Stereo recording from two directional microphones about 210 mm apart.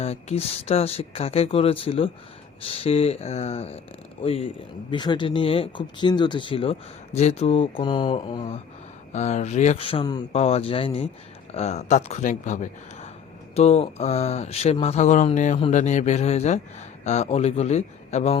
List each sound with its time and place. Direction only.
0.0 s speech: 30° left (ahead or behind)